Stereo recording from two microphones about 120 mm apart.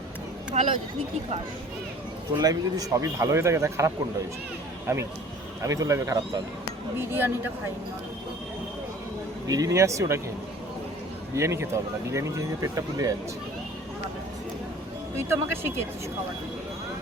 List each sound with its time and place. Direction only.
0.5 s speech: 70° right (ahead or behind)
2.3 s speech: 30° right (ahead or behind)
7.0 s speech: 15° right (ahead or behind)
9.5 s speech: 30° right (ahead or behind)
11.3 s speech: 25° right (ahead or behind)